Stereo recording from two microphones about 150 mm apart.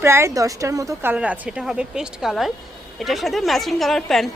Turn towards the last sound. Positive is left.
turn(degrees=5)  # may be behind; listen again after turning